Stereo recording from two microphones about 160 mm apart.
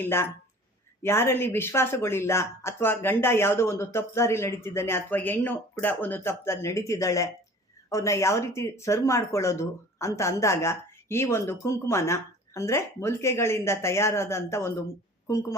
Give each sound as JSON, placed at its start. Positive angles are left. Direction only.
{"t": 0.0, "sound": "speech", "side_deg": 15}